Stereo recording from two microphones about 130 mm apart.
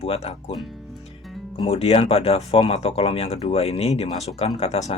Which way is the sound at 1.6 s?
50° left (ahead or behind).